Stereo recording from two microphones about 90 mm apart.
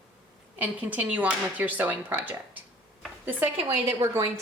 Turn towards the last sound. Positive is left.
turn(degrees=-30)  # may be behind; listen again after turning